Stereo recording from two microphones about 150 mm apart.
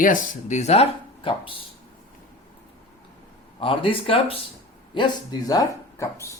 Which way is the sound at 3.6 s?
35° left (ahead or behind).